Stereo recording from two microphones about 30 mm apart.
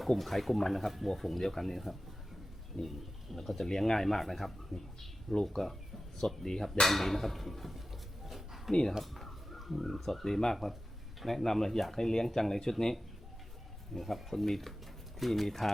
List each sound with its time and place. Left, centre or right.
0.0 s speech: centre
5.3 s speech: centre
8.3 s a sound: centre
9.1 s speech: centre
13.9 s speech: centre